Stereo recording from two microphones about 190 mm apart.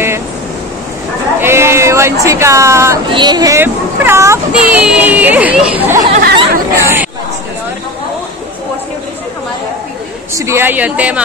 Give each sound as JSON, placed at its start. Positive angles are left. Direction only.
{"t": 1.4, "sound": "speech", "side_deg": -15}
{"t": 6.2, "sound": "chatter", "side_deg": -60}
{"t": 6.8, "sound": "speech", "side_deg": -10}
{"t": 10.3, "sound": "speech", "side_deg": -15}